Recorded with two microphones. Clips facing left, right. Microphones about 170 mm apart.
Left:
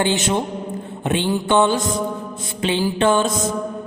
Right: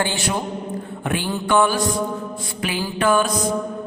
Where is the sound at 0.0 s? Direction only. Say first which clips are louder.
Left 4 dB; 20° left (ahead or behind).